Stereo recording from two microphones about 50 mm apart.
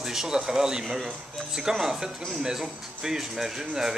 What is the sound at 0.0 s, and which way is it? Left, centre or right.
Speech, centre.